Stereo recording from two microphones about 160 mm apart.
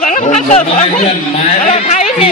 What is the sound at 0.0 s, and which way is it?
Speech, 50° left (ahead or behind).